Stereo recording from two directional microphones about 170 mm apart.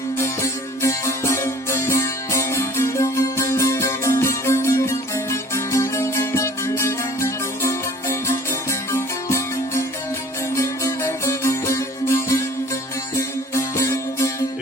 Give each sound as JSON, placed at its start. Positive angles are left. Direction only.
{"t": 0.2, "sound": "music", "side_deg": 15}